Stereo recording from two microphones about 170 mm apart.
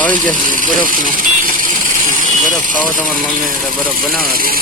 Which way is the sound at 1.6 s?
50° right (ahead or behind).